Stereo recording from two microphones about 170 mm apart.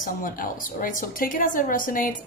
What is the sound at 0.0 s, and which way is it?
A woman's voice, 55° left (ahead or behind).